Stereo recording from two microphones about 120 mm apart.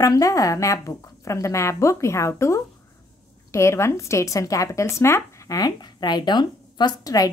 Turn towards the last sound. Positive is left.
turn(degrees=30)  # may be behind; listen again after turning